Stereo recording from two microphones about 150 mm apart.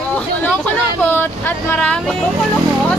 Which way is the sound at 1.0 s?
15° left (ahead or behind).